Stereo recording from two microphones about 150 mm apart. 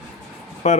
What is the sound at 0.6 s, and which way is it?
Speech, 50° left (ahead or behind).